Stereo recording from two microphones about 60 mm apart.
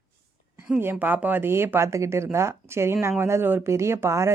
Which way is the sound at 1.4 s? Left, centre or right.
Right.